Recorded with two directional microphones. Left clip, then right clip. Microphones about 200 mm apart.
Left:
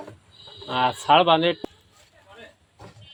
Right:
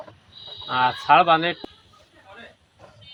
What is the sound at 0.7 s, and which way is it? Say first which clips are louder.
Speech: right 1 dB; 30° left (ahead or behind).